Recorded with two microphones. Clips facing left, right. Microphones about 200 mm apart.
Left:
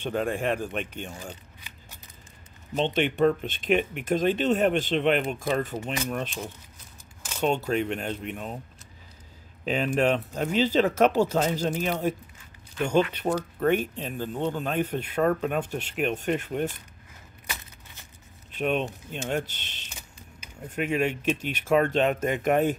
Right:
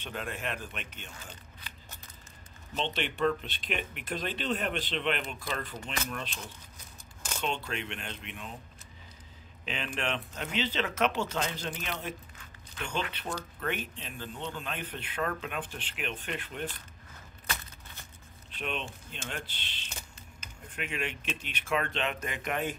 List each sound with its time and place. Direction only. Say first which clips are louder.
0.0 s speech: left 10 dB; 45° left (ahead or behind)
2.7 s speech: left 8 dB; 50° left (ahead or behind)
7.4 s speech: left 10 dB; 40° left (ahead or behind)
9.7 s speech: left 11 dB; 40° left (ahead or behind)
18.6 s speech: left 10 dB; 45° left (ahead or behind)